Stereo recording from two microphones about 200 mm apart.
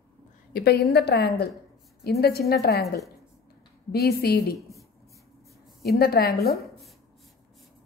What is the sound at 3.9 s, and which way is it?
Speech, 50° left (ahead or behind).